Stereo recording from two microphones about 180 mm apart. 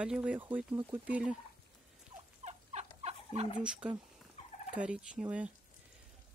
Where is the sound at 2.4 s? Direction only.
40° right (ahead or behind).